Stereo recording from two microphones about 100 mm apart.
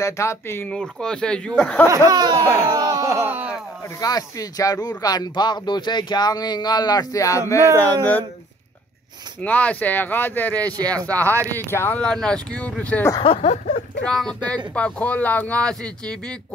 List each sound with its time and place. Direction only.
0.0 s speech: 30° left (ahead or behind)
0.7 s speech: 5° left (ahead or behind)
1.9 s speech: 35° right (ahead or behind)
2.4 s speech: 35° right (ahead or behind)
3.3 s a sound: 20° right (ahead or behind)
4.0 s speech: 40° left (ahead or behind)
7.6 s speech: 30° right (ahead or behind)
9.4 s speech: 15° left (ahead or behind)
10.8 s speech: 35° right (ahead or behind)
11.5 s speech: 20° left (ahead or behind)
12.0 s speech: 5° left (ahead or behind)
13.2 s speech: 85° left
14.0 s speech: 5° left (ahead or behind)